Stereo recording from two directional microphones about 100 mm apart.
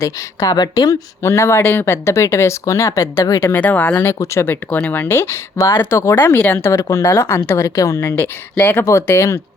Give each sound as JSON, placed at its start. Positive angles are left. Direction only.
{"t": 0.0, "sound": "speech", "side_deg": 35}
{"t": 3.5, "sound": "speech", "side_deg": 15}
{"t": 3.9, "sound": "speech", "side_deg": 25}
{"t": 8.8, "sound": "speech", "side_deg": 30}